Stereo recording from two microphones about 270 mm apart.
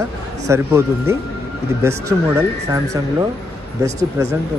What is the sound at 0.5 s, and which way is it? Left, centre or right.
Speech, centre.